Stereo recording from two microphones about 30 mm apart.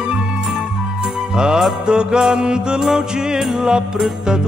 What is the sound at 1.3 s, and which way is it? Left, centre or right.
Jingle bell, right.